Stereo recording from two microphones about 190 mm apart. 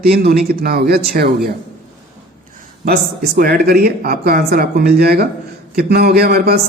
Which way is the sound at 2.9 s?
50° right (ahead or behind).